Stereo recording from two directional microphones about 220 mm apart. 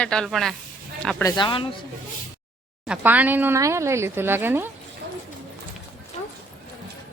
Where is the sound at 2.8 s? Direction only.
5° right (ahead or behind).